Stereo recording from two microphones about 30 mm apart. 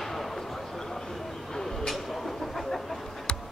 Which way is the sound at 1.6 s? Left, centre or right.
Centre.